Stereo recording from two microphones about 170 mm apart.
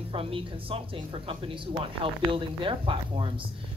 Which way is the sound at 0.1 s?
30° right (ahead or behind).